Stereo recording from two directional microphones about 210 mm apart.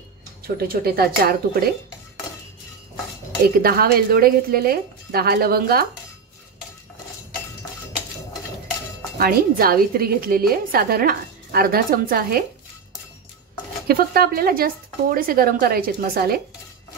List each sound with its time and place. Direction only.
0.6 s a woman's voice: 45° right (ahead or behind)
3.4 s a woman's voice: 45° right (ahead or behind)
9.2 s a woman's voice: 45° right (ahead or behind)
13.8 s a woman's voice: 45° right (ahead or behind)